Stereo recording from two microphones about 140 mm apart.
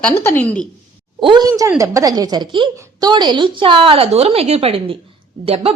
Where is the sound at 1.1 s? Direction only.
35° right (ahead or behind).